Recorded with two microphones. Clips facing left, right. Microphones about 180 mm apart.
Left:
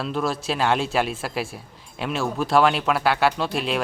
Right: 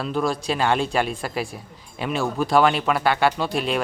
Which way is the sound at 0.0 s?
Centre (ahead or behind).